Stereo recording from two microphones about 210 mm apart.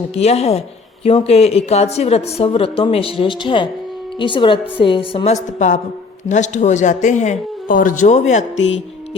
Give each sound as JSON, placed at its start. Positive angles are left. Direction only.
{"t": 0.1, "sound": "a woman's voice", "side_deg": 30}
{"t": 8.5, "sound": "music", "side_deg": 60}